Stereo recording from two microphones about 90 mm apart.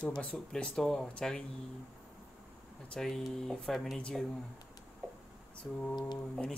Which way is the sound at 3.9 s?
10° left (ahead or behind).